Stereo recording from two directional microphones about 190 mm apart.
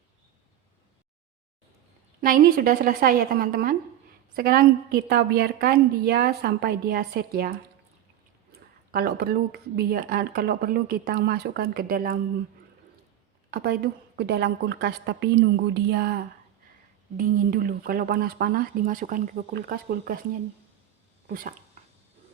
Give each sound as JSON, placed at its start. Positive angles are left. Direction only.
{"t": 2.2, "sound": "a woman's voice", "side_deg": -50}
{"t": 8.5, "sound": "speech", "side_deg": -55}
{"t": 13.5, "sound": "a woman's voice", "side_deg": -55}
{"t": 21.2, "sound": "speech", "side_deg": -45}